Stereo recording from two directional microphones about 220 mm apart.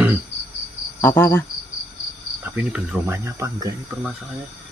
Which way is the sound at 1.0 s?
10° left (ahead or behind).